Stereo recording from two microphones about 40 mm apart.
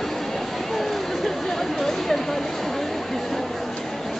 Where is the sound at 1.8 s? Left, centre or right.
Centre.